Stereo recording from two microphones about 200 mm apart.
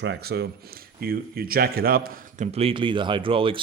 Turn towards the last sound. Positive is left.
turn(degrees=-25)  # may be behind; listen again after turning